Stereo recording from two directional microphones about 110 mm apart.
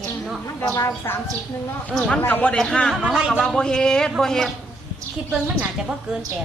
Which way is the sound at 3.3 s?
5° left (ahead or behind).